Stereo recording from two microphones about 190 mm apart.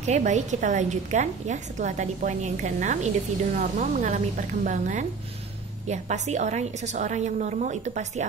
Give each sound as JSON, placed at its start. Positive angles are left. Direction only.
{"t": 0.0, "sound": "a woman's voice", "side_deg": -40}